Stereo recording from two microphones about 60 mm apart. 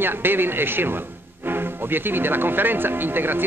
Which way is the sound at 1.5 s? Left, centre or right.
Right.